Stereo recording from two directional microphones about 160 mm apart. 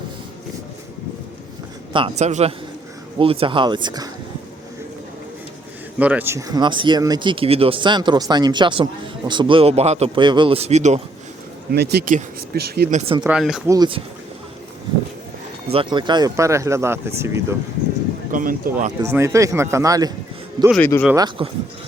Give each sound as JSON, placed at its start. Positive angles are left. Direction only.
{"t": 1.9, "sound": "speech", "side_deg": -35}
{"t": 6.0, "sound": "speech", "side_deg": -10}
{"t": 10.2, "sound": "speech", "side_deg": -30}
{"t": 11.7, "sound": "speech", "side_deg": -85}
{"t": 13.2, "sound": "speech", "side_deg": -5}
{"t": 13.7, "sound": "speech", "side_deg": -25}
{"t": 15.7, "sound": "speech", "side_deg": -30}
{"t": 18.3, "sound": "speech", "side_deg": -55}
{"t": 19.0, "sound": "speech", "side_deg": -15}
{"t": 20.7, "sound": "speech", "side_deg": 10}
{"t": 21.2, "sound": "speech", "side_deg": -30}